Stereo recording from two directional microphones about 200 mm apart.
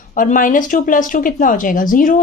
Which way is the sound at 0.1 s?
40° left (ahead or behind).